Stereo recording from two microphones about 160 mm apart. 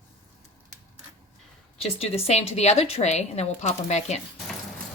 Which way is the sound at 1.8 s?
40° left (ahead or behind).